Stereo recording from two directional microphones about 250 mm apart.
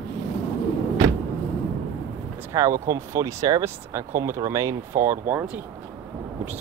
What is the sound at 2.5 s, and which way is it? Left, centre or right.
Speech, centre.